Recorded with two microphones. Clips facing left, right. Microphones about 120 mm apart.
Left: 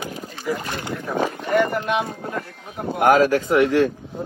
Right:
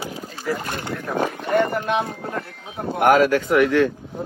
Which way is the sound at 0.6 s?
50° right (ahead or behind).